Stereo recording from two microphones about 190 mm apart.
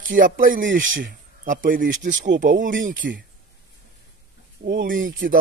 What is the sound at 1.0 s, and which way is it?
Speech, 45° right (ahead or behind).